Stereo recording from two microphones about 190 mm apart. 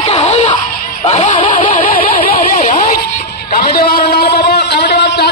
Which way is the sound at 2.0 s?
30° left (ahead or behind).